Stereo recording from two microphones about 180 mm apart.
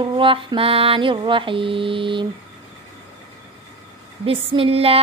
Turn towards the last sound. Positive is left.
turn(degrees=-35)  # may be behind; listen again after turning